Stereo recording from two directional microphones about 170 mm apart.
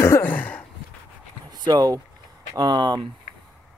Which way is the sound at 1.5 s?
25° right (ahead or behind).